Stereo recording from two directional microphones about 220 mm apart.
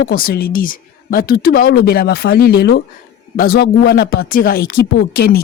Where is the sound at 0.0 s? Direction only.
40° left (ahead or behind).